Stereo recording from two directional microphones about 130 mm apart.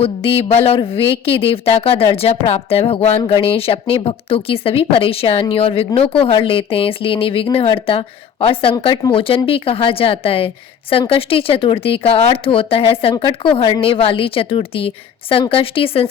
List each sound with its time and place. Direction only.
0.0 s speech: 45° left (ahead or behind)